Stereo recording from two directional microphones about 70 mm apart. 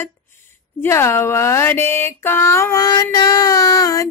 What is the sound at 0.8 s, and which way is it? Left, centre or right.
Speech, left.